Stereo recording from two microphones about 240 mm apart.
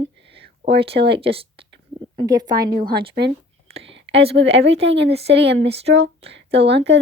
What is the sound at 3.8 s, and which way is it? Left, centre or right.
Whispering, right.